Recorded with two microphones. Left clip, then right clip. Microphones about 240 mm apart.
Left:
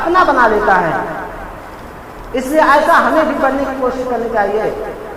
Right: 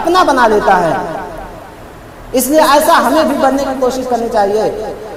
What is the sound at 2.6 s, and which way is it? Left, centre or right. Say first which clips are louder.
Speech: even; right.